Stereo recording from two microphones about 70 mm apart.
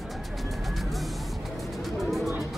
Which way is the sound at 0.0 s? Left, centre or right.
Centre.